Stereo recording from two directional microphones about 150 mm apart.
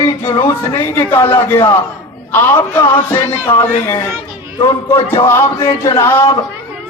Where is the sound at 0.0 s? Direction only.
30° left (ahead or behind).